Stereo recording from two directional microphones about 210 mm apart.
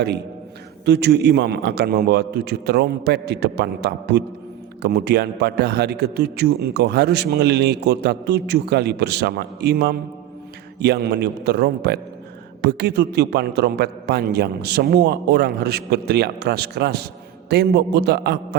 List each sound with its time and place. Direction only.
0.9 s a man's voice: 55° right (ahead or behind)